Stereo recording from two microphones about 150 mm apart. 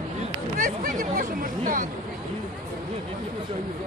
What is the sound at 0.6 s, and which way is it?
A man's voice, 60° right (ahead or behind).